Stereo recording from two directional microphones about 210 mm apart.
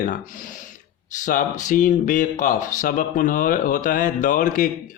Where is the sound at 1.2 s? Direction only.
40° left (ahead or behind).